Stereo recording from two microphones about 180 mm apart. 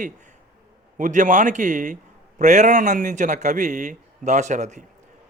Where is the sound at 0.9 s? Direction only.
45° right (ahead or behind).